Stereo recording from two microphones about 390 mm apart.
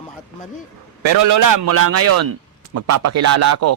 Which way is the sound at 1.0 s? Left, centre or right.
Right.